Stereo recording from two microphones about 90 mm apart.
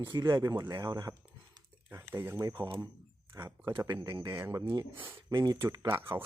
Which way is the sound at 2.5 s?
55° right (ahead or behind).